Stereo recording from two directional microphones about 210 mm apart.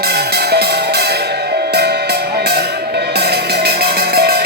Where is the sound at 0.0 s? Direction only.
50° right (ahead or behind).